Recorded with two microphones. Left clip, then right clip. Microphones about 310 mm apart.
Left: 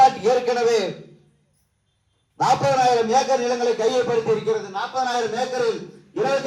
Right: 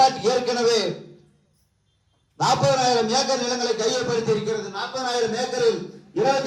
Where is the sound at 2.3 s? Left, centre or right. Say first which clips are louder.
Left 2 dB; left.